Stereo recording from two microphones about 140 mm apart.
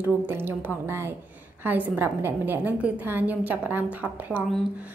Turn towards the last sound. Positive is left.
turn(degrees=-10)  # may be behind; listen again after turning